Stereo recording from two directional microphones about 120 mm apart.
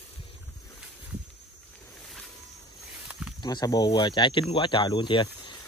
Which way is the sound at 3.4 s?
35° left (ahead or behind).